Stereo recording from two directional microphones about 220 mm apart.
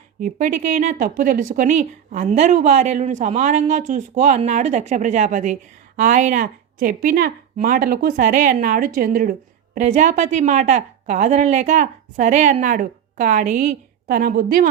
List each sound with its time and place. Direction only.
0.2 s speech: 35° right (ahead or behind)